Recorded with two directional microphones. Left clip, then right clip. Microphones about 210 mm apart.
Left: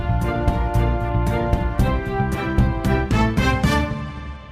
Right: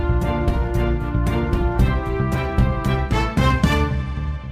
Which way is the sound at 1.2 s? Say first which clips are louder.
Right 2 dB; centre (ahead or behind).